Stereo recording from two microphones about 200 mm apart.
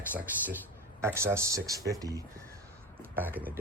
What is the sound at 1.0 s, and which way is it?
Speech, 15° right (ahead or behind).